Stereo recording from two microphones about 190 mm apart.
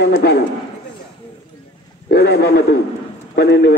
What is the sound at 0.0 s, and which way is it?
Speech, 60° left (ahead or behind).